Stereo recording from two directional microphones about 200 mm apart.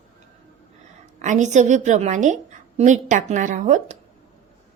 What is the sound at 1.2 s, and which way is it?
A woman's voice, 35° right (ahead or behind).